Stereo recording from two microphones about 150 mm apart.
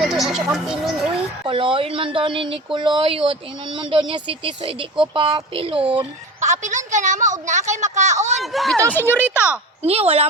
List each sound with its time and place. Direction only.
0.0 s speech: centre (ahead or behind)
1.5 s speech: 35° right (ahead or behind)
6.4 s a woman's voice: 55° right (ahead or behind)
8.4 s speech: centre (ahead or behind)
8.9 s speech: 15° left (ahead or behind)
9.8 s speech: 40° right (ahead or behind)